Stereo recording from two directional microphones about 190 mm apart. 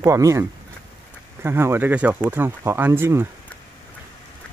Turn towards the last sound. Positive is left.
turn(degrees=-10)  # may be behind; listen again after turning